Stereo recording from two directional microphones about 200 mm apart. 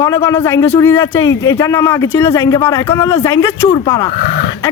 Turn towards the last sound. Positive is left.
turn(degrees=45)  # may be behind; listen again after turning